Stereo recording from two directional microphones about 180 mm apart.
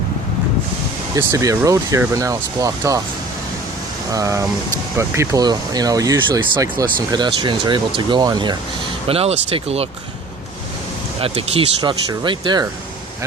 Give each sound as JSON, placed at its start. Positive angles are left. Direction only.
{"t": 1.1, "sound": "speech", "side_deg": -20}
{"t": 4.1, "sound": "speech", "side_deg": -15}
{"t": 9.0, "sound": "speech", "side_deg": -35}
{"t": 11.2, "sound": "speech", "side_deg": -30}